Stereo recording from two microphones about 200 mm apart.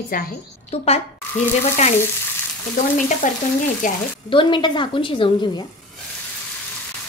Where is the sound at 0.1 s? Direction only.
45° left (ahead or behind).